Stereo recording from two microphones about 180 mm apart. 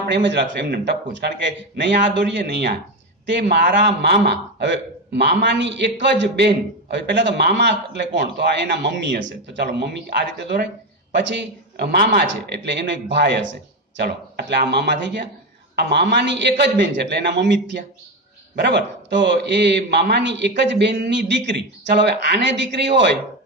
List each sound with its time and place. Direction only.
0.1 s a man's voice: 75° right (ahead or behind)
12.3 s a man's voice: 75° right (ahead or behind)